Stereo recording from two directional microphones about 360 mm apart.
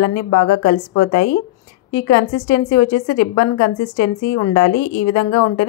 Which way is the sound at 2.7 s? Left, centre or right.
Left.